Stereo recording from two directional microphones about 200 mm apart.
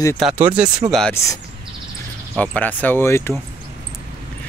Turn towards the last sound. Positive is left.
turn(degrees=10)  # may be behind; listen again after turning